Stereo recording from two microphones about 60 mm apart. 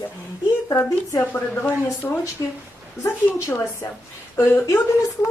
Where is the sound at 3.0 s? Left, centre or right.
Left.